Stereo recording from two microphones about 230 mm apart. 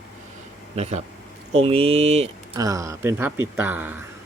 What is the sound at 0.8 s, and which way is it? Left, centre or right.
Speech, right.